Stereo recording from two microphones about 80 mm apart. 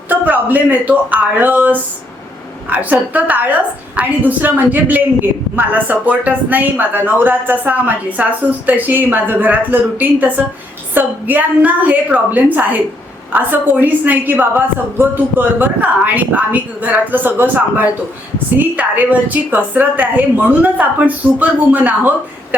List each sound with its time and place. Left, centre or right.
0.1 s a woman's voice: right